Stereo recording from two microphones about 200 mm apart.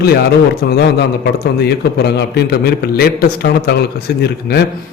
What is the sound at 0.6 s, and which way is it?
A man's voice, 50° left (ahead or behind).